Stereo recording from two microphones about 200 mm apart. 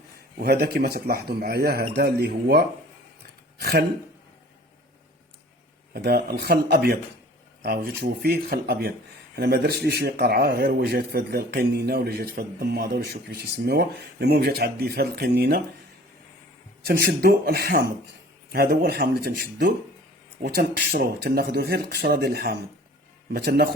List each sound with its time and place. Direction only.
0.4 s speech: 50° right (ahead or behind)
5.9 s speech: 50° right (ahead or behind)
16.8 s speech: 55° right (ahead or behind)